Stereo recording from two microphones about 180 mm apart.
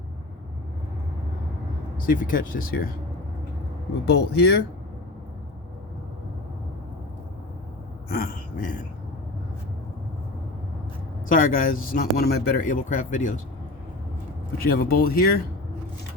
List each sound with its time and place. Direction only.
2.0 s speech: 50° left (ahead or behind)
4.0 s speech: 65° left (ahead or behind)
8.1 s speech: 50° left (ahead or behind)
11.3 s speech: 50° left (ahead or behind)
14.6 s speech: 55° left (ahead or behind)